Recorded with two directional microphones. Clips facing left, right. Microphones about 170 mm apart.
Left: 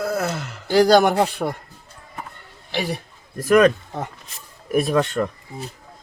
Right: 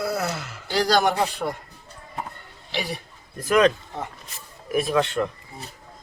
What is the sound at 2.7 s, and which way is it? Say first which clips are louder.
Speech: left 4 dB; 55° left (ahead or behind).